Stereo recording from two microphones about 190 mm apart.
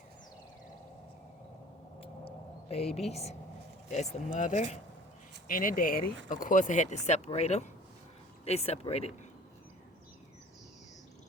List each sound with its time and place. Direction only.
2.0 s vehicle: 30° left (ahead or behind)
3.1 s speech: 35° left (ahead or behind)